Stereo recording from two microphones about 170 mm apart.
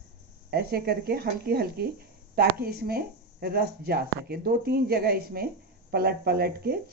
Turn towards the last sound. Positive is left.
turn(degrees=-65)  # may be behind; listen again after turning